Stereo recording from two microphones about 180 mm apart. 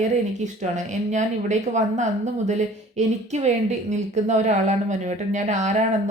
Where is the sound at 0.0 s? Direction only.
40° right (ahead or behind).